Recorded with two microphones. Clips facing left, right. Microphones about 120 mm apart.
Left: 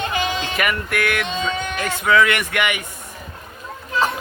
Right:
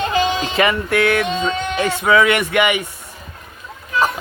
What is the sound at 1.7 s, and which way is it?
Mantra, 25° right (ahead or behind).